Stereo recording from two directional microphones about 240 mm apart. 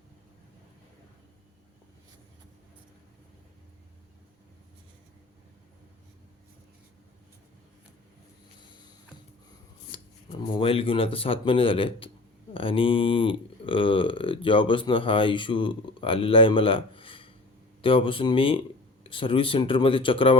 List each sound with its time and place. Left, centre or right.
9.9 s speech: left